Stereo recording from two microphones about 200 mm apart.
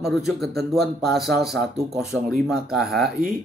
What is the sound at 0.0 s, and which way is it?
A man's voice, centre (ahead or behind).